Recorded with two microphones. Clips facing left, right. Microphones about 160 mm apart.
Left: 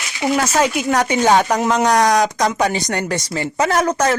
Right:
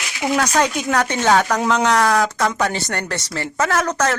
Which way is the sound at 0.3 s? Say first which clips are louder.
Even; 5° left (ahead or behind).